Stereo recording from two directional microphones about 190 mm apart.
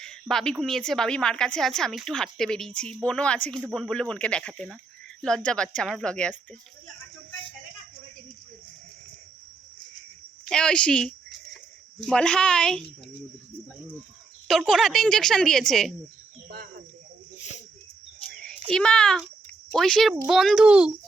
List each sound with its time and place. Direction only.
0.0 s a sound: 5° left (ahead or behind)
0.6 s speech: centre (ahead or behind)
10.5 s speech: 5° left (ahead or behind)
14.4 s speech: centre (ahead or behind)
17.3 s a sound: 40° left (ahead or behind)
18.7 s speech: 5° left (ahead or behind)